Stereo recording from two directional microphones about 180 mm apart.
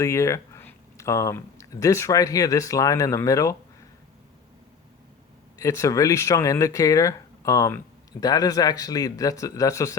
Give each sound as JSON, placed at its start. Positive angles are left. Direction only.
{"t": 0.0, "sound": "speech", "side_deg": 15}
{"t": 5.5, "sound": "speech", "side_deg": 15}